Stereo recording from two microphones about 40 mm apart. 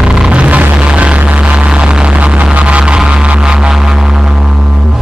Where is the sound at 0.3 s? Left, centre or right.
Right.